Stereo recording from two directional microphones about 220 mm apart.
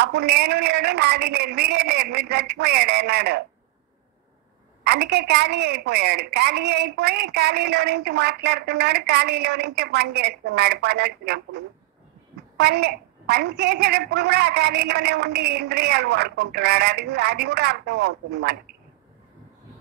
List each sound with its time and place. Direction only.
0.0 s a woman's voice: 50° right (ahead or behind)
4.8 s a woman's voice: 50° right (ahead or behind)